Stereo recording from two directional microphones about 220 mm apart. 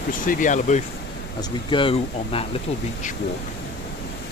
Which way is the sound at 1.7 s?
25° left (ahead or behind).